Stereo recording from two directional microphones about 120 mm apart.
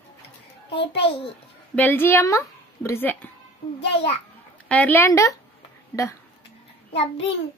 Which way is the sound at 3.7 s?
55° left (ahead or behind).